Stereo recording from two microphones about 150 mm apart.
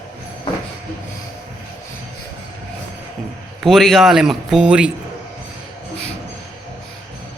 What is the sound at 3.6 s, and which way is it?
Speech, centre (ahead or behind).